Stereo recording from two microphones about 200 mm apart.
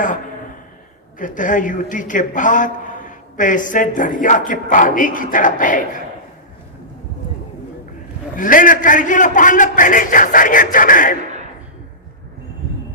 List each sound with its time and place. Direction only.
1.2 s a man's voice: 40° left (ahead or behind)
8.4 s a man's voice: 40° left (ahead or behind)